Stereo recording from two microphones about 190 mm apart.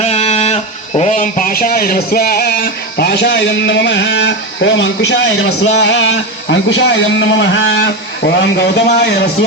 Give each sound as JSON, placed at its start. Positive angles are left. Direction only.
{"t": 0.0, "sound": "speech", "side_deg": 35}